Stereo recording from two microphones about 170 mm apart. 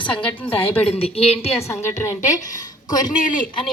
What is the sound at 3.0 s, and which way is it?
Speech, 50° left (ahead or behind).